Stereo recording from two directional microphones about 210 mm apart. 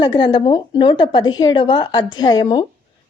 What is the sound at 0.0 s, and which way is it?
Speech, 20° left (ahead or behind).